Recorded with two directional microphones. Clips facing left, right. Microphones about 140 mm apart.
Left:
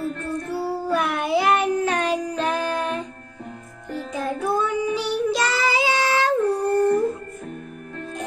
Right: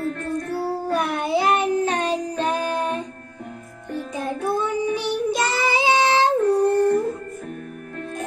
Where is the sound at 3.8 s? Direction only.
25° right (ahead or behind).